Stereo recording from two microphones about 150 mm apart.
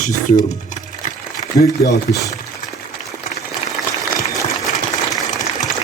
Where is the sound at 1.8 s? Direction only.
20° left (ahead or behind).